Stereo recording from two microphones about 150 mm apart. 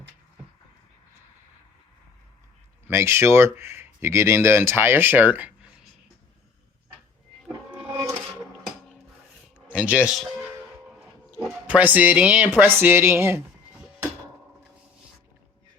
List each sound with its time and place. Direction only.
2.8 s speech: 15° right (ahead or behind)
9.6 s speech: 10° right (ahead or behind)
11.6 s speech: 10° right (ahead or behind)